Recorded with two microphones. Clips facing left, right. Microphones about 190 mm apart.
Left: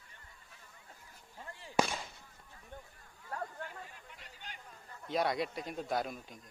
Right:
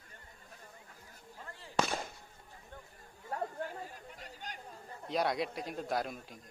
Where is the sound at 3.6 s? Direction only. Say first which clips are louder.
Right 5 dB; 40° right (ahead or behind).